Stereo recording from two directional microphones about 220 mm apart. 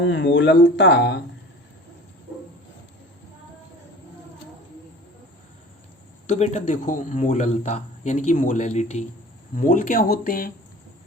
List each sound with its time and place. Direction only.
0.0 s speech: 55° left (ahead or behind)
6.2 s speech: 30° left (ahead or behind)